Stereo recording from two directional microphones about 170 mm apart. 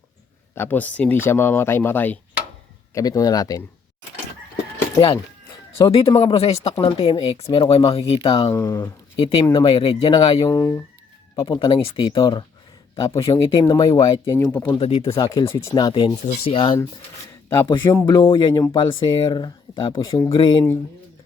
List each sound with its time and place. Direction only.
0.5 s speech: 10° left (ahead or behind)
4.9 s speech: 35° left (ahead or behind)
8.5 s speech: 15° left (ahead or behind)
9.1 s speech: 35° left (ahead or behind)
10.4 s speech: 15° left (ahead or behind)
11.3 s speech: 30° left (ahead or behind); by 14.7 s 10° left (ahead or behind)
14.7 s speech: 30° left (ahead or behind)
15.3 s speech: 15° left (ahead or behind)
15.7 s speech: 30° left (ahead or behind)
16.2 s speech: 40° left (ahead or behind)
18.0 s speech: 30° left (ahead or behind)
20.3 s speech: 30° left (ahead or behind)